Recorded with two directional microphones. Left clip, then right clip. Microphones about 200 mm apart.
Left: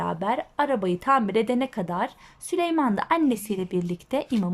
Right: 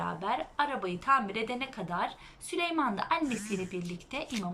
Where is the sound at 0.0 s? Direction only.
35° left (ahead or behind).